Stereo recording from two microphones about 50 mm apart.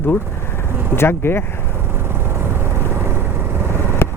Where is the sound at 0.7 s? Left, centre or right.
Right.